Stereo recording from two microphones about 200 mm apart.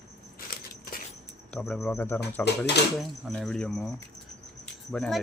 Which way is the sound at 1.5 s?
Centre (ahead or behind).